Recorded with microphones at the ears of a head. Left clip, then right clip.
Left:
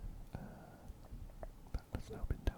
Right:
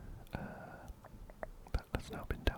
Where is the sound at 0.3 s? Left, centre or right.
Right.